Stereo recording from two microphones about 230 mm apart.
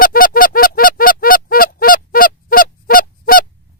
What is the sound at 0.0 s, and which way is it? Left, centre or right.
Honk, left.